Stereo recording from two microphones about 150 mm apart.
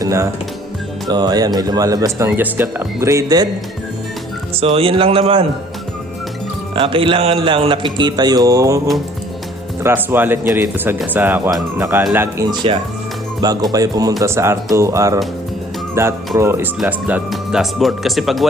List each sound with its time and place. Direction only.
0.0 s music: 20° right (ahead or behind)
1.0 s speech: 25° right (ahead or behind)
4.5 s speech: 40° right (ahead or behind)
6.7 s speech: 35° right (ahead or behind)
9.8 s speech: 15° right (ahead or behind)
13.4 s speech: 25° right (ahead or behind)
17.3 s speech: centre (ahead or behind)